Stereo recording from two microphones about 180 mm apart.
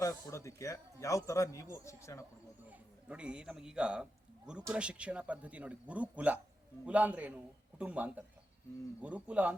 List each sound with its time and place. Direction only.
0.0 s speech: 15° left (ahead or behind)
2.6 s a man's voice: 5° right (ahead or behind)